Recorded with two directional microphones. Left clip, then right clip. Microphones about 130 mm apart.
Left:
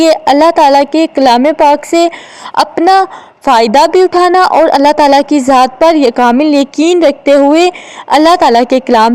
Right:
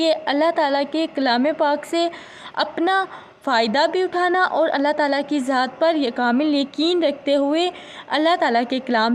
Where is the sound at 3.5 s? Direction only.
55° left (ahead or behind).